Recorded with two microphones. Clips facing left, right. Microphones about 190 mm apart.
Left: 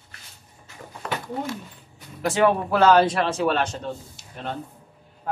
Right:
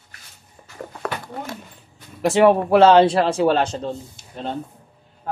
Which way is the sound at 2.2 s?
25° right (ahead or behind).